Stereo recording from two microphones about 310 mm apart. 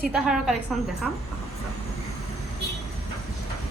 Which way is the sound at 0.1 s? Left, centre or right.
Centre.